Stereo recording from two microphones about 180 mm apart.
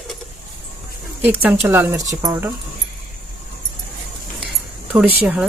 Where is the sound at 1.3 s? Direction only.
10° right (ahead or behind).